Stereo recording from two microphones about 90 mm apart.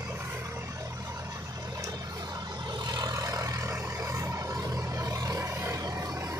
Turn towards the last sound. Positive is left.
turn(degrees=-30)  # may be behind; listen again after turning